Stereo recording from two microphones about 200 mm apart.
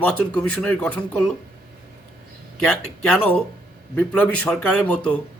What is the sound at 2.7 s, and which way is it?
A man's voice, 5° left (ahead or behind).